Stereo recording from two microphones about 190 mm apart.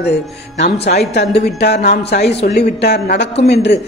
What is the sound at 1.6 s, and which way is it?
A woman's voice, 60° left (ahead or behind).